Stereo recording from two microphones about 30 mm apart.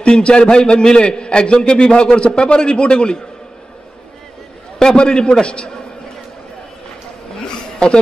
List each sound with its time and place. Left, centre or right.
0.0 s a man's voice: left
4.7 s a man's voice: left